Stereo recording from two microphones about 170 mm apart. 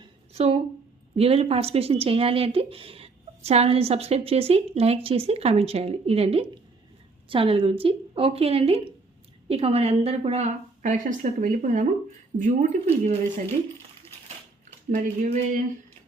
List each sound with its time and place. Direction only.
0.3 s a woman's voice: 35° right (ahead or behind)
14.8 s speech: 45° right (ahead or behind)